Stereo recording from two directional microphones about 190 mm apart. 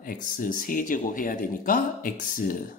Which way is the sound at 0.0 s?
45° left (ahead or behind).